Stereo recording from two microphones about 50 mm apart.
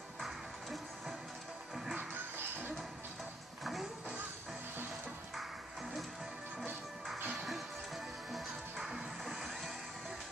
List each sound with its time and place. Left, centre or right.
0.2 s music: centre
2.0 s music: right
7.2 s music: centre